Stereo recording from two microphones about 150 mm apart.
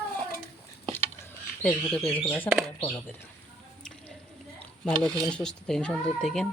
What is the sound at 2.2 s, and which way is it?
Speech, 10° left (ahead or behind).